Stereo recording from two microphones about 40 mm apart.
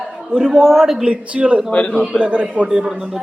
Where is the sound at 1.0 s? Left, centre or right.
Right.